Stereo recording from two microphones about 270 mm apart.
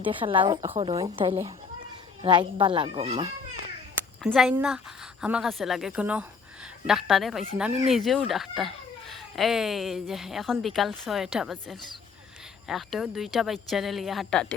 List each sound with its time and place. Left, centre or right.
0.0 s a woman's voice: centre
4.2 s speech: centre